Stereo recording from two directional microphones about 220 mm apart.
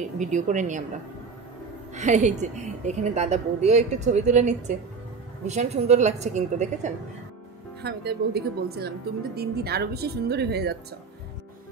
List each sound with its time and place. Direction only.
0.2 s a woman's voice: 35° right (ahead or behind)
2.0 s a woman's voice: 30° right (ahead or behind)
7.8 s speech: 45° right (ahead or behind)